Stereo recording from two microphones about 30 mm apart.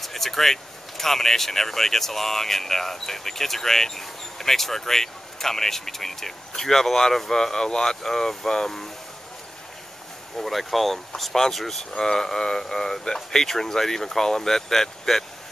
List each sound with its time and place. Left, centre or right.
0.0 s speech: centre
10.4 s speech: centre